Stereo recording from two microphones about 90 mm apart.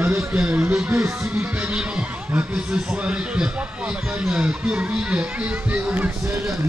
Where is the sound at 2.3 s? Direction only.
10° right (ahead or behind).